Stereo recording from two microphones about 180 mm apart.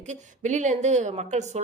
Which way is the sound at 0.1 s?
40° right (ahead or behind).